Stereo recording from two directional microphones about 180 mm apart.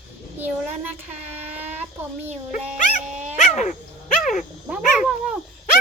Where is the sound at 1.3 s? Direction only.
10° right (ahead or behind).